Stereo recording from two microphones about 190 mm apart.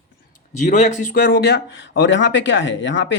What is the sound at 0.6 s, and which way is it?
Speech, 40° left (ahead or behind).